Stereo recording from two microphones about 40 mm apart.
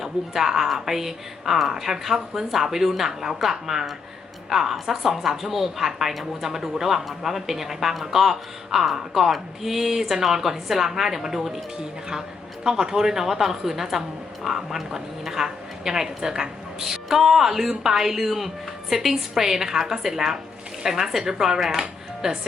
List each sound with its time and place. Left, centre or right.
0.0 s speech: centre
11.8 s speech: centre